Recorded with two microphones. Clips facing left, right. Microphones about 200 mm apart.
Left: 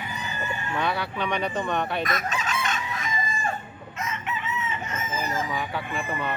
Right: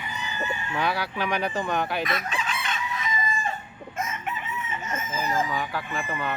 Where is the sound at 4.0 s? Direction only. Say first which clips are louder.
Even; 50° right (ahead or behind).